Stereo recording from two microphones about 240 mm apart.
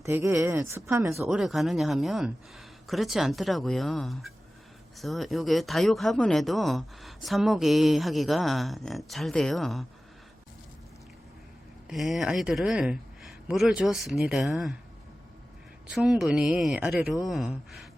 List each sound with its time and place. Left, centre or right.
0.0 s speech: centre
1.1 s speech: centre
11.9 s speech: centre
15.9 s speech: centre